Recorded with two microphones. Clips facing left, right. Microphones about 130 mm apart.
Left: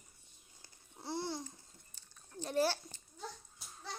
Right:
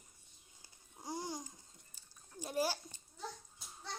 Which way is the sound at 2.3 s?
10° right (ahead or behind).